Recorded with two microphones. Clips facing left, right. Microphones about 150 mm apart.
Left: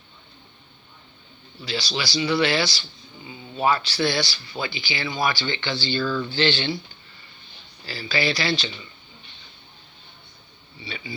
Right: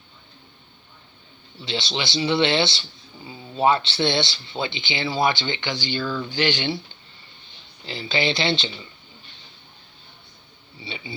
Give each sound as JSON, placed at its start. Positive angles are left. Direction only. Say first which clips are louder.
{"t": 1.6, "sound": "speech", "louder": "right 1 dB", "side_deg": -25}
{"t": 7.9, "sound": "speech", "louder": "right 1 dB", "side_deg": -25}
{"t": 10.8, "sound": "speech", "louder": "even", "side_deg": -25}